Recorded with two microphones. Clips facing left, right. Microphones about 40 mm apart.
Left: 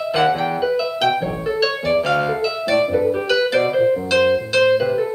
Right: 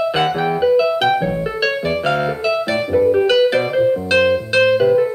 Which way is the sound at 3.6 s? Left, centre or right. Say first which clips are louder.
Right 1 dB; centre.